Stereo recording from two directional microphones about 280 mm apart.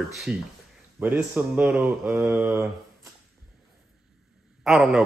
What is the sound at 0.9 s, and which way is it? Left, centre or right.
Mantra, centre.